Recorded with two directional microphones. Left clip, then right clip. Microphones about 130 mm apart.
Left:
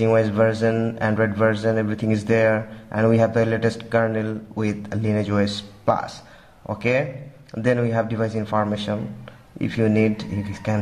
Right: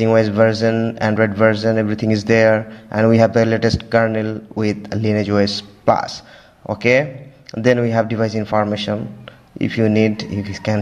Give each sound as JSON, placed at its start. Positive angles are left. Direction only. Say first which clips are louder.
{"t": 0.0, "sound": "speech", "louder": "right 4 dB", "side_deg": -30}